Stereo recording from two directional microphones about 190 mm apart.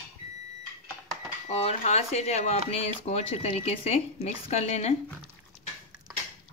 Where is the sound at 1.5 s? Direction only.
35° left (ahead or behind).